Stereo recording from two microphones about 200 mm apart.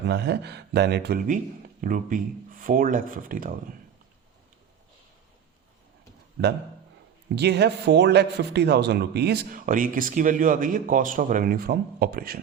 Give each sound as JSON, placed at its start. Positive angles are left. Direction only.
{"t": 0.1, "sound": "speech", "side_deg": -60}
{"t": 1.8, "sound": "speech", "side_deg": -40}
{"t": 7.3, "sound": "speech", "side_deg": -55}